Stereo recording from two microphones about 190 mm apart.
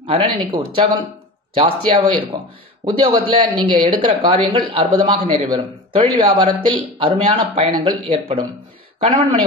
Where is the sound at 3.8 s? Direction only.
20° right (ahead or behind).